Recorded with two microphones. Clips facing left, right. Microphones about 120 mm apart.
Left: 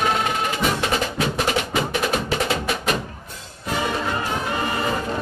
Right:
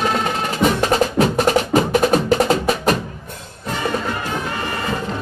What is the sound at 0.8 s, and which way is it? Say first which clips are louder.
Music: right 7 dB; 40° right (ahead or behind).